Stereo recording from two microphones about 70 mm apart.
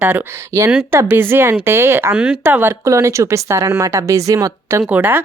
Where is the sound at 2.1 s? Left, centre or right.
Right.